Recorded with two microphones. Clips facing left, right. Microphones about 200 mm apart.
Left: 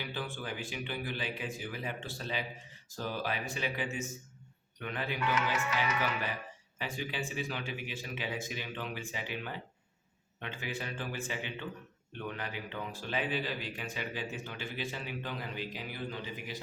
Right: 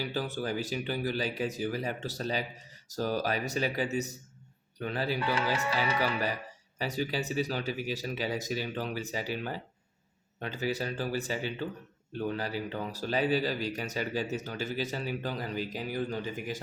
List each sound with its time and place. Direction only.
0.0 s a man's voice: 40° right (ahead or behind)